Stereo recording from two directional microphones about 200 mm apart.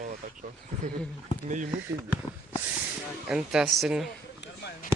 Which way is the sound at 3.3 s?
5° right (ahead or behind).